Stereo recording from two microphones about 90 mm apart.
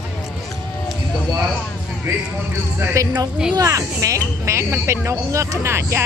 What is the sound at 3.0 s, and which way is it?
Speech, 35° right (ahead or behind).